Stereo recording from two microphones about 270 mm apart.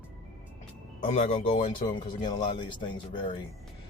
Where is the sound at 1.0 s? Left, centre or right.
Left.